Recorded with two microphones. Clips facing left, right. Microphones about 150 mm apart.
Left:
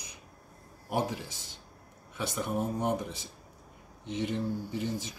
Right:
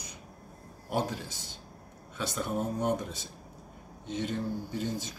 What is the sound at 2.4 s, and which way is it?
Speech, 15° left (ahead or behind).